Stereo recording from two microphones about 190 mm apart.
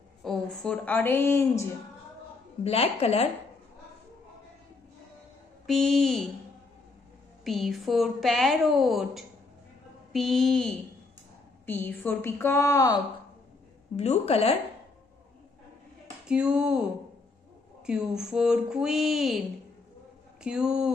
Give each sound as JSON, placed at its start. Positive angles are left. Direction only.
{"t": 0.2, "sound": "a woman's voice", "side_deg": 0}
{"t": 2.6, "sound": "a woman's voice", "side_deg": 30}
{"t": 5.7, "sound": "a woman's voice", "side_deg": 0}
{"t": 7.4, "sound": "a woman's voice", "side_deg": 0}
{"t": 13.9, "sound": "a woman's voice", "side_deg": 35}
{"t": 16.3, "sound": "a woman's voice", "side_deg": -5}
{"t": 17.8, "sound": "a woman's voice", "side_deg": -5}
{"t": 20.4, "sound": "a woman's voice", "side_deg": -5}